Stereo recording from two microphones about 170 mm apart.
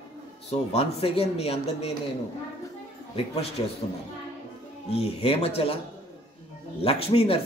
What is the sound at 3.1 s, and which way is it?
Speech, 35° left (ahead or behind).